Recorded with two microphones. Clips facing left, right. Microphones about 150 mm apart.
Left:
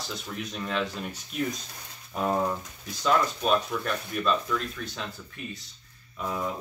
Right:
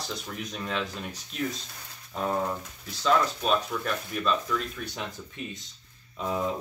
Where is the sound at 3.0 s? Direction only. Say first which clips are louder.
Even; centre (ahead or behind).